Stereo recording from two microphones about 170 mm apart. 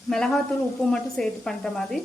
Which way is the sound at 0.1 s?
5° left (ahead or behind).